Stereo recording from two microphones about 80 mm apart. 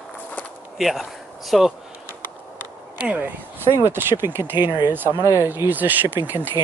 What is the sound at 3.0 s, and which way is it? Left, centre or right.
Speech, right.